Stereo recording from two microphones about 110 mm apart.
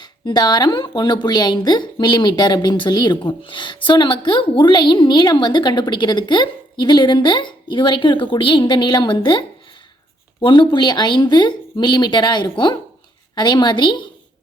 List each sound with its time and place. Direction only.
0.0 s a woman's voice: 40° left (ahead or behind)
10.4 s a woman's voice: 45° left (ahead or behind)